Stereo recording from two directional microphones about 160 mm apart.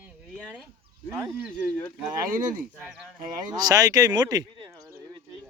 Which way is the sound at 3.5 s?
25° right (ahead or behind).